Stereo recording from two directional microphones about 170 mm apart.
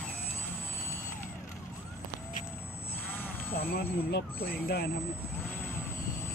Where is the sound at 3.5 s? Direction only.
65° left (ahead or behind).